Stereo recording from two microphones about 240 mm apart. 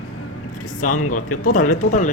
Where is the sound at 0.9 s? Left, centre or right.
Left.